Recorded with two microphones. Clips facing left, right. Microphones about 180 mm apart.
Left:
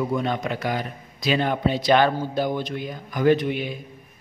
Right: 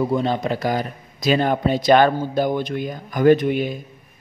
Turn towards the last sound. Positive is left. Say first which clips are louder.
# right 5 dB
turn(degrees=-45)  # may be behind; listen again after turning